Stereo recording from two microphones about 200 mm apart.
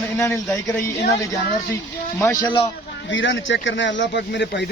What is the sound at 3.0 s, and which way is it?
Speech, 70° left (ahead or behind).